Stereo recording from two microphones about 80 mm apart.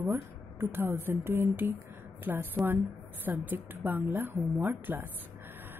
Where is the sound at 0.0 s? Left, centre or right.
Right.